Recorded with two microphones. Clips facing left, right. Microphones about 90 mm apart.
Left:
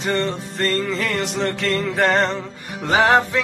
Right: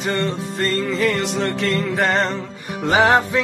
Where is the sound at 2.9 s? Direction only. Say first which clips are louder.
Right 1 dB; 15° right (ahead or behind).